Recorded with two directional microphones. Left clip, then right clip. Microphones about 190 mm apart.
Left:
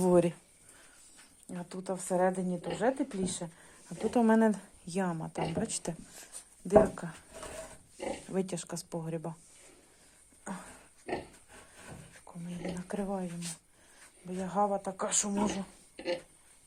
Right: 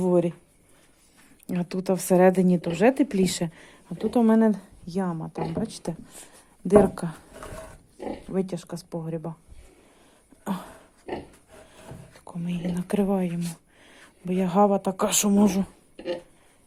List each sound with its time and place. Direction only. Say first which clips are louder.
0.0 s speech: right 3 dB; centre (ahead or behind)
1.5 s a woman's voice: right 11 dB; 40° right (ahead or behind)
4.0 s speech: right 5 dB; 10° right (ahead or behind)
6.1 s speech: right 3 dB; 25° right (ahead or behind)
8.3 s speech: right 9 dB; 5° right (ahead or behind)
10.4 s a sound: right 10 dB; 40° right (ahead or behind)
12.2 s a woman's voice: right 8 dB; 40° right (ahead or behind)
14.3 s a woman's voice: right 9 dB; 40° right (ahead or behind)